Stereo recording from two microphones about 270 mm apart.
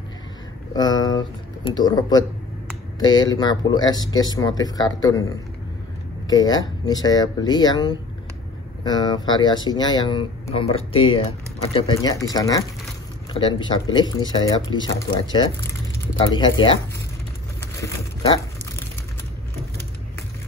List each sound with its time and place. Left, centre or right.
0.7 s speech: centre
6.2 s speech: centre
16.2 s speech: centre